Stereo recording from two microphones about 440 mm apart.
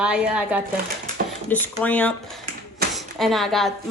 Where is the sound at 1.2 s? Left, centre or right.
Centre.